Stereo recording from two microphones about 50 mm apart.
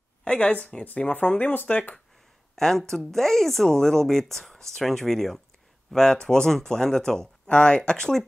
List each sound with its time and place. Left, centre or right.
0.2 s a woman's voice: left
2.5 s speech: centre